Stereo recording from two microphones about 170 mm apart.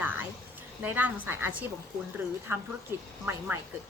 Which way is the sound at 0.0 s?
10° right (ahead or behind).